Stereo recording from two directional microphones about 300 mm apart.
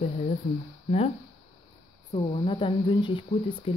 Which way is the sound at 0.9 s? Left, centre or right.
Centre.